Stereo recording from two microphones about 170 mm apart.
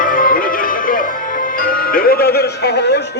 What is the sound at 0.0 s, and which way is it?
Music, 55° left (ahead or behind).